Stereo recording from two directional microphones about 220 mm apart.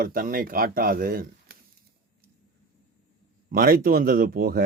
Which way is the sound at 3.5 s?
40° right (ahead or behind).